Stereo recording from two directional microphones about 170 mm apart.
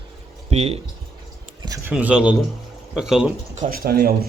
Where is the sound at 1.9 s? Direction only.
10° right (ahead or behind).